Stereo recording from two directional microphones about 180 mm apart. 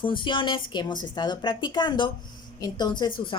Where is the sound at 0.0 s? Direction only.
30° left (ahead or behind).